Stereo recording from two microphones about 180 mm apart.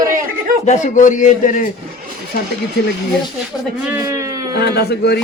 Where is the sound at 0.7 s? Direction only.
45° left (ahead or behind).